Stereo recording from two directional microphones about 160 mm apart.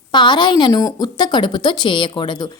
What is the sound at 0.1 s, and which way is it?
A woman's voice, 30° left (ahead or behind).